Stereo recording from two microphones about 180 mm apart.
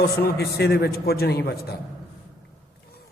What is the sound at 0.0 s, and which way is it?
A man's voice, 60° left (ahead or behind).